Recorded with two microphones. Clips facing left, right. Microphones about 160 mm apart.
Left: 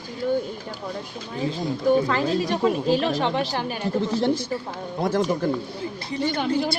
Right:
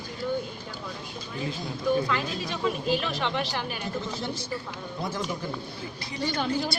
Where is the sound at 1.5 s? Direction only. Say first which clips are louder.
Left 6 dB; 30° left (ahead or behind).